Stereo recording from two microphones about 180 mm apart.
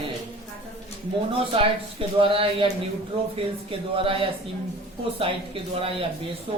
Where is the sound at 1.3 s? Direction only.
30° right (ahead or behind).